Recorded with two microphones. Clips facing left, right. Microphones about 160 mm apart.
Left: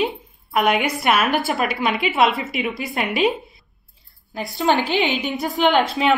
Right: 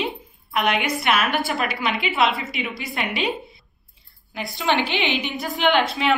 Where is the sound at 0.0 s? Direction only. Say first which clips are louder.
Left 5 dB; 40° left (ahead or behind).